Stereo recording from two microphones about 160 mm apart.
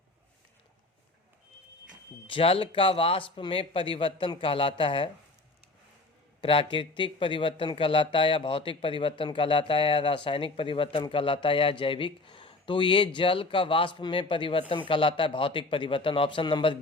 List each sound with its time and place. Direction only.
2.2 s speech: 35° left (ahead or behind)
6.4 s speech: 35° left (ahead or behind)